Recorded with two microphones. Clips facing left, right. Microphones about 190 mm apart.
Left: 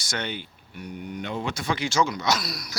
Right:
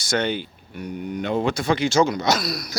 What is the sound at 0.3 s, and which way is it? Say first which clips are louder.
Speech: right 8 dB; 90° right.